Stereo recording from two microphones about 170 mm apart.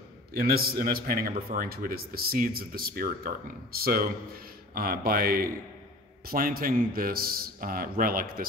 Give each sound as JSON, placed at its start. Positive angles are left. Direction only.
{"t": 0.3, "sound": "a man's voice", "side_deg": -60}